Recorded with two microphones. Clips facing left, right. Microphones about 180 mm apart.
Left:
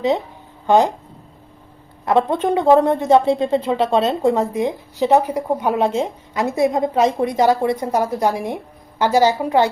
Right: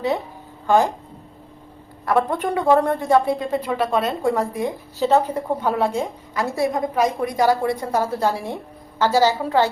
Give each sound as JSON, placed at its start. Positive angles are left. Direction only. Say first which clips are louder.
{"t": 0.7, "sound": "a woman's voice", "louder": "left 3 dB", "side_deg": 20}
{"t": 2.0, "sound": "a woman's voice", "louder": "left 3 dB", "side_deg": 20}